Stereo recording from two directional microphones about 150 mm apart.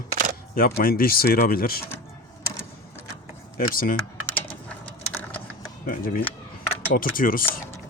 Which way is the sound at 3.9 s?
10° left (ahead or behind).